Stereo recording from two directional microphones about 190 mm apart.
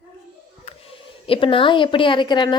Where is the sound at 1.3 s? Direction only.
30° left (ahead or behind).